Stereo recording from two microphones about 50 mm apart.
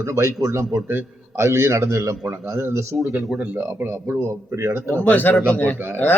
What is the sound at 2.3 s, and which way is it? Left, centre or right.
Speech, right.